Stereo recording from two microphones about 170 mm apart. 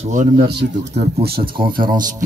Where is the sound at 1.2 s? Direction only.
65° right (ahead or behind).